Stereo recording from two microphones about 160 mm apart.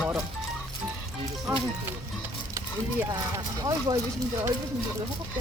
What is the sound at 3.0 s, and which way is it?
Speech, 20° right (ahead or behind).